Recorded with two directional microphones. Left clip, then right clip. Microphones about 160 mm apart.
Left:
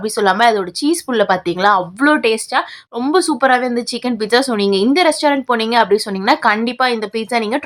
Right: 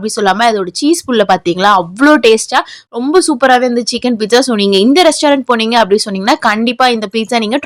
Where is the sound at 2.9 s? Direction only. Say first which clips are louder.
Right 4 dB; 25° right (ahead or behind).